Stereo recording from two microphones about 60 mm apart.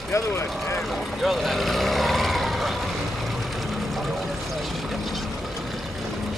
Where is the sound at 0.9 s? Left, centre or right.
Centre.